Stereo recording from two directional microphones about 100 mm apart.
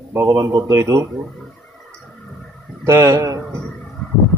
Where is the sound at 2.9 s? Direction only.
30° right (ahead or behind).